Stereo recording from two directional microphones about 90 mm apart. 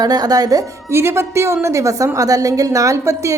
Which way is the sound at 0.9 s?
30° right (ahead or behind).